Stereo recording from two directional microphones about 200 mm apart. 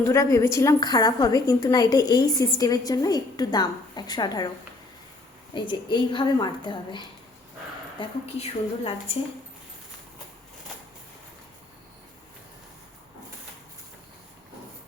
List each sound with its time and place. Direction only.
0.0 s a woman's voice: 15° left (ahead or behind)
5.5 s a woman's voice: 25° left (ahead or behind)